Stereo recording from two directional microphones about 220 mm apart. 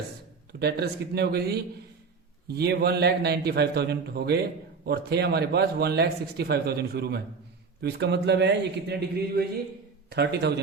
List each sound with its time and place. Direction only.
0.6 s speech: 45° right (ahead or behind)